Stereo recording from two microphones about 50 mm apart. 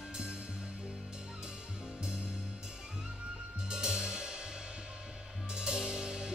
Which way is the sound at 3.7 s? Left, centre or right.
Centre.